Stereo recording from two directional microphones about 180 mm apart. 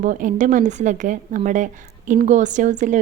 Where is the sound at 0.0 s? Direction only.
45° right (ahead or behind).